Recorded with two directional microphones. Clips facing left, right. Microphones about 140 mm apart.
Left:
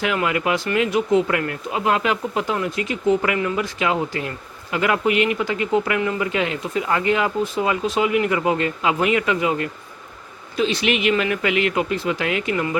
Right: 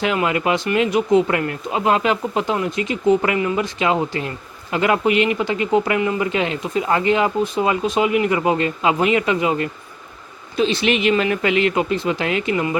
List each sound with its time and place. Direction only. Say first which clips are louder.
0.0 s speech: right 2 dB; 25° right (ahead or behind)